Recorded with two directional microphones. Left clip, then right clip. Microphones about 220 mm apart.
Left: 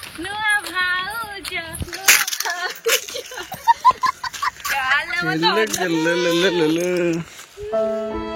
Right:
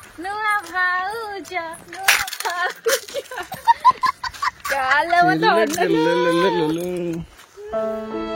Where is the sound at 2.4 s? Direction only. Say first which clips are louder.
Left 1 dB; 25° right (ahead or behind).